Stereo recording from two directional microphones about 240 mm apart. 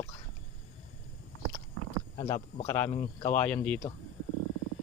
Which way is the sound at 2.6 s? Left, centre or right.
Centre.